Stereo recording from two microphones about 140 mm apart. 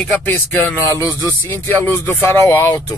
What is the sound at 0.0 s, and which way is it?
Speech, 15° left (ahead or behind).